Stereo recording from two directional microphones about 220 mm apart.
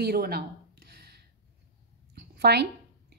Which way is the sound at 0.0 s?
45° right (ahead or behind).